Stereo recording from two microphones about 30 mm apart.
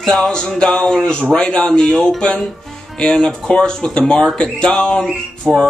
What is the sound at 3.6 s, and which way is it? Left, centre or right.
Speech, left.